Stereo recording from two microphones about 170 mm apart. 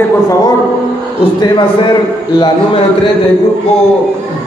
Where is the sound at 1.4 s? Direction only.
30° left (ahead or behind).